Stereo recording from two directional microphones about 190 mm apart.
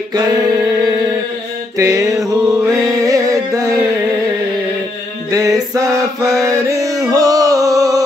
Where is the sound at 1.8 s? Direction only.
15° right (ahead or behind).